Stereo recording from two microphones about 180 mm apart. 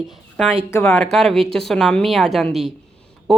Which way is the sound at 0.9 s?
Centre (ahead or behind).